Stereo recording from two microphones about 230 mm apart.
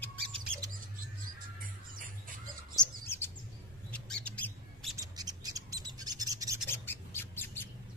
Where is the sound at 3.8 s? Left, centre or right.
Centre.